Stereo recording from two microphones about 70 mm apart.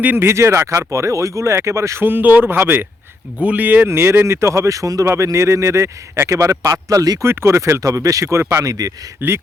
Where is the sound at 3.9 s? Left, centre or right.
Right.